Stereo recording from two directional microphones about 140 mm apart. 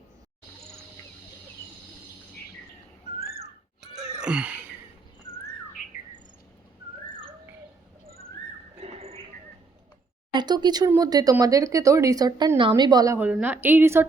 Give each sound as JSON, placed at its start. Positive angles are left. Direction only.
{"t": 3.8, "sound": "wail", "side_deg": -5}
{"t": 5.8, "sound": "bird", "side_deg": 70}
{"t": 8.0, "sound": "a sound", "side_deg": -90}
{"t": 8.8, "sound": "horse", "side_deg": -45}
{"t": 10.3, "sound": "speech", "side_deg": -30}
{"t": 13.1, "sound": "speech", "side_deg": -10}